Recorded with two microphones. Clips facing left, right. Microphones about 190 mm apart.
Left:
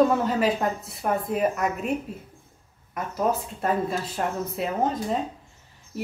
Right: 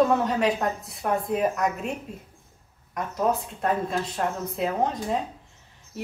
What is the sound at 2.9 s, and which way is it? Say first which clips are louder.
A woman's voice: even; 5° left (ahead or behind).